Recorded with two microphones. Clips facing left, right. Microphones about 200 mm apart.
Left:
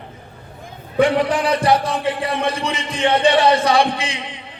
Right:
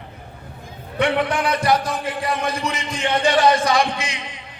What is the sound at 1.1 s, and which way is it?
A man's voice, 35° left (ahead or behind).